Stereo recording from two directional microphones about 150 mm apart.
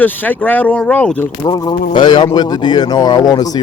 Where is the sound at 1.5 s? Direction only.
30° left (ahead or behind).